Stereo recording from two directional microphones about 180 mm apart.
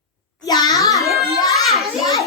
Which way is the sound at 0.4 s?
20° left (ahead or behind).